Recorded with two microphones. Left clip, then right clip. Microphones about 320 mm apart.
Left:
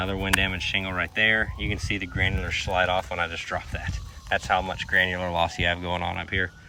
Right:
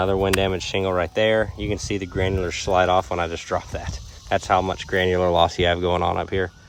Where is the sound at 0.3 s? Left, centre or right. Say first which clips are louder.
Right 2 dB; centre.